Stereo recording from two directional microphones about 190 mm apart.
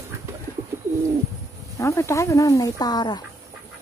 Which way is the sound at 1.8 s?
15° left (ahead or behind).